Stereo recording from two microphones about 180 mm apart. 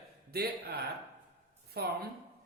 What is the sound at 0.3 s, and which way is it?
A man's voice, 60° right (ahead or behind).